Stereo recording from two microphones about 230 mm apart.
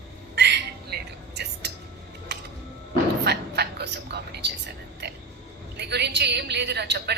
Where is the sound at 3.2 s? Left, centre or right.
Right.